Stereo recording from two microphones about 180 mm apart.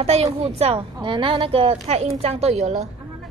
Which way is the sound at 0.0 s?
35° right (ahead or behind).